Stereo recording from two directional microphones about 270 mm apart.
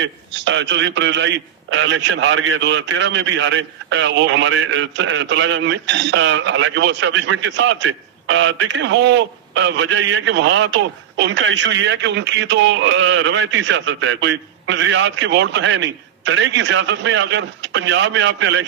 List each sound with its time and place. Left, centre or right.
0.0 s a man's voice: right